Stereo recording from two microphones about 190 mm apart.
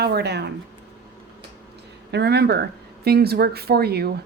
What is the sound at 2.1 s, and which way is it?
Speech, 60° right (ahead or behind).